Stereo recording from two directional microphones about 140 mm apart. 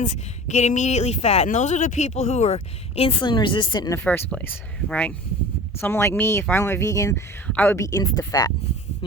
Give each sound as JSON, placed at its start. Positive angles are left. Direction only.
{"t": 0.0, "sound": "speech", "side_deg": 60}
{"t": 3.2, "sound": "speech", "side_deg": 35}
{"t": 4.0, "sound": "a woman's voice", "side_deg": 5}
{"t": 7.4, "sound": "a woman's voice", "side_deg": 10}